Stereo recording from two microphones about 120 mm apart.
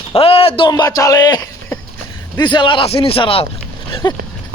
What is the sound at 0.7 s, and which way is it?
Speech, 30° left (ahead or behind).